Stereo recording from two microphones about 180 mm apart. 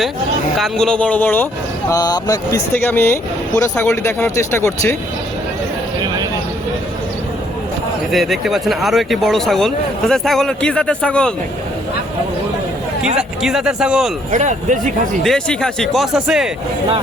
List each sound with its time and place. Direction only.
0.6 s speech: 5° left (ahead or behind)
1.9 s speech: 20° left (ahead or behind)
8.1 s speech: centre (ahead or behind)
13.1 s speech: 5° right (ahead or behind)
14.3 s speech: 45° right (ahead or behind)
15.2 s speech: centre (ahead or behind)